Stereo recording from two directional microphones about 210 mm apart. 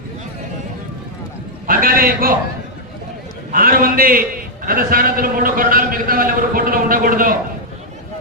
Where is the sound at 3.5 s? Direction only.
45° right (ahead or behind).